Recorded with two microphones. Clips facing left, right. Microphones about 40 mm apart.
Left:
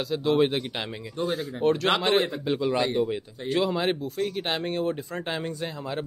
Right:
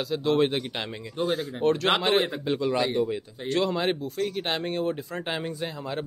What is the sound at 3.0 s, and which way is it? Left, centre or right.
Speech, centre.